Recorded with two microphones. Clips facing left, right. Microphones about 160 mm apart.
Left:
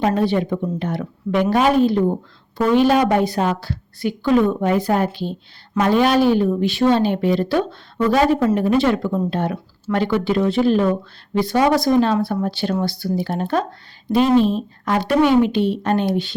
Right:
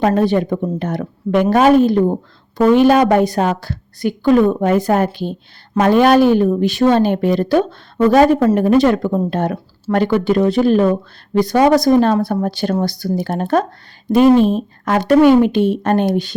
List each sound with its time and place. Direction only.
0.0 s a woman's voice: 50° right (ahead or behind)